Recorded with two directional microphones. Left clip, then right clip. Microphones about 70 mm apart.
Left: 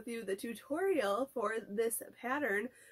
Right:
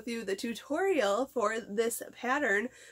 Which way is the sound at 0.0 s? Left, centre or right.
Right.